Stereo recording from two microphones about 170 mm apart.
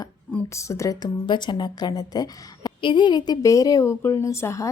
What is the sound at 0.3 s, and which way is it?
A woman's voice, 15° left (ahead or behind).